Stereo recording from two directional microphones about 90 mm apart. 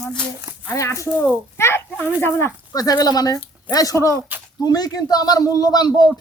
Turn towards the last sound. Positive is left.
turn(degrees=50)  # may be behind; listen again after turning